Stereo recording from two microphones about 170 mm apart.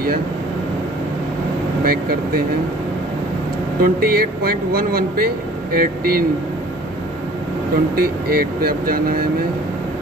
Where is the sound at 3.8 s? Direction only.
60° right (ahead or behind).